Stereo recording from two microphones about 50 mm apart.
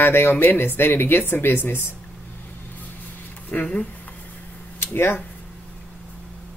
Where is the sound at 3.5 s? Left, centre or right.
Left.